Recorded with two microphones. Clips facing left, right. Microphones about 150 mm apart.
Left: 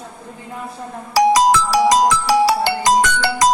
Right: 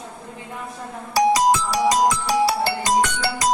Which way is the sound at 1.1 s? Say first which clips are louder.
Left 4 dB; 90° left.